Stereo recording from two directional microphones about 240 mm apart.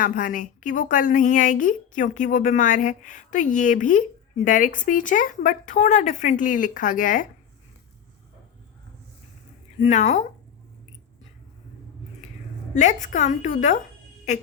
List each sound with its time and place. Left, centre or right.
0.0 s a woman's voice: left
9.8 s speech: left
12.7 s a woman's voice: left